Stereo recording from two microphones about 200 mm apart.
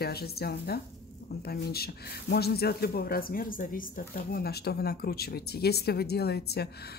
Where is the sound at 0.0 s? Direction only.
50° left (ahead or behind).